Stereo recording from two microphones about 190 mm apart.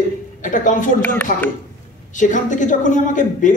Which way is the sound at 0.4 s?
45° left (ahead or behind).